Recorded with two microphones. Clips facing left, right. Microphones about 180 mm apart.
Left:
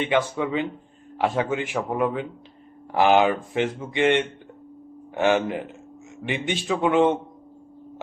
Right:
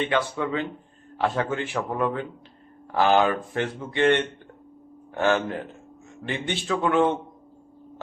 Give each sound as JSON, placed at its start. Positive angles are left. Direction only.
{"t": 0.0, "sound": "speech", "side_deg": 15}